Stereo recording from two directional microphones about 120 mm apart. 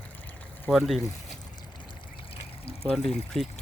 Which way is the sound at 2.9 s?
Centre (ahead or behind).